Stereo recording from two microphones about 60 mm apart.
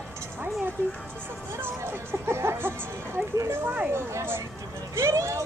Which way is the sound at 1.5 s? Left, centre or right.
Right.